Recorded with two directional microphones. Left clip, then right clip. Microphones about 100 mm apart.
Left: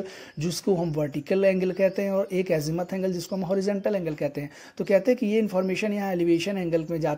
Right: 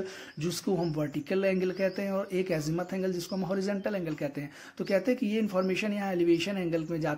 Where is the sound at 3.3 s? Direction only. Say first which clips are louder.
Left 6 dB; 35° left (ahead or behind).